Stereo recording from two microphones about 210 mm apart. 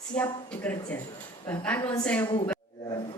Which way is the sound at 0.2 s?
5° left (ahead or behind).